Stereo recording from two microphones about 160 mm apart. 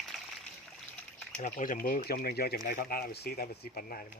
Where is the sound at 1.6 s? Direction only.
60° left (ahead or behind); by 2.5 s 80° left.